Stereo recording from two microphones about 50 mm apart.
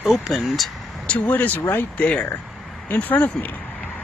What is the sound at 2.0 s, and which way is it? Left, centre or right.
Speech, centre.